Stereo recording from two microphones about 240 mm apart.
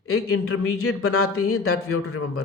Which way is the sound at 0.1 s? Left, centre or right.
Left.